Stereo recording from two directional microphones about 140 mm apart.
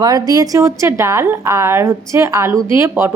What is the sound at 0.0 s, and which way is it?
A woman's voice, 25° right (ahead or behind).